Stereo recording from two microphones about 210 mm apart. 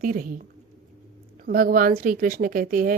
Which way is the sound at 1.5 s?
45° right (ahead or behind).